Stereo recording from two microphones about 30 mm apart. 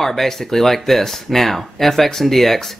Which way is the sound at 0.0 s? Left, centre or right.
Centre.